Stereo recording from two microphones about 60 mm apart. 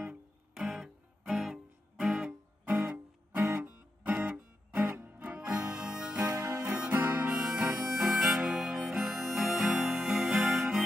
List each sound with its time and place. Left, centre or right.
0.6 s music: centre
2.6 s music: right
5.7 s harmonica: centre
6.3 s music: right
6.6 s music: centre
6.9 s harmonica: right
7.5 s harmonica: right
7.9 s harmonica: centre
9.1 s music: centre